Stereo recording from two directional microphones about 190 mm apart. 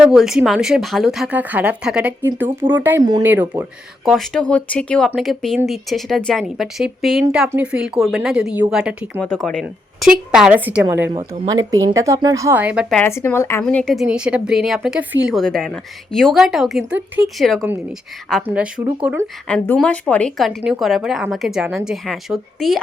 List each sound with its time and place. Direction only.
0.0 s a woman's voice: centre (ahead or behind)
3.4 s speech: 20° right (ahead or behind)
4.0 s a woman's voice: centre (ahead or behind)
9.2 s a woman's voice: 5° left (ahead or behind); by 11.1 s 10° right (ahead or behind)
11.1 s speech: 20° right (ahead or behind); by 13.0 s 5° right (ahead or behind)
13.0 s a woman's voice: 10° left (ahead or behind); by 19.2 s 10° right (ahead or behind)
19.5 s a woman's voice: 5° left (ahead or behind)